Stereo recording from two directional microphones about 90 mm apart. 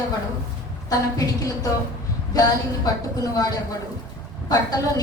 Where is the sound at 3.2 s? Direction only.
40° left (ahead or behind).